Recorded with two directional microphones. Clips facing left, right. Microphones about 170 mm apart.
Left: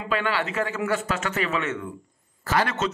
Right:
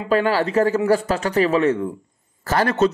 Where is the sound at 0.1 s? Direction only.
40° right (ahead or behind).